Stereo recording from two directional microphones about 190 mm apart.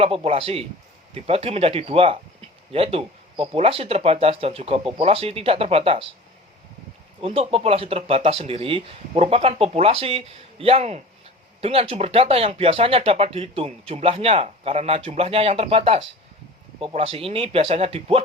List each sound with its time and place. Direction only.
0.0 s speech: 30° right (ahead or behind)
7.2 s speech: 30° right (ahead or behind)